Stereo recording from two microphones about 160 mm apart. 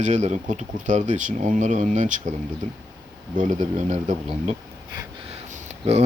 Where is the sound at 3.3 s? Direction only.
50° right (ahead or behind).